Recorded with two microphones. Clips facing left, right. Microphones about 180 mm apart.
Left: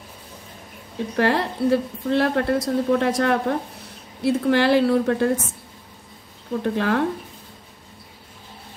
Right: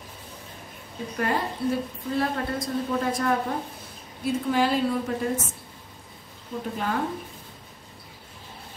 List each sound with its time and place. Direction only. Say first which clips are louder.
1.1 s a woman's voice: left 6 dB; 75° left (ahead or behind)
6.6 s a woman's voice: left 7 dB; 80° left